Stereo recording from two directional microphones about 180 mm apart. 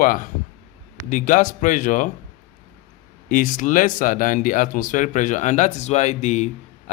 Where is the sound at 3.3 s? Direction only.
50° left (ahead or behind).